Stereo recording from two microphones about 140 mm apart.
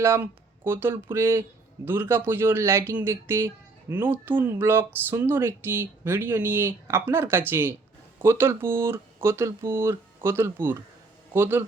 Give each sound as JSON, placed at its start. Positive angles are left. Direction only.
{"t": 0.0, "sound": "speech", "side_deg": -15}